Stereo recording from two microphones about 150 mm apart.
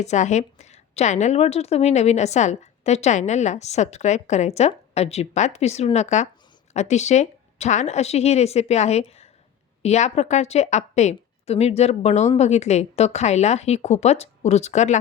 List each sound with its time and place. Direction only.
0.0 s a woman's voice: 50° left (ahead or behind)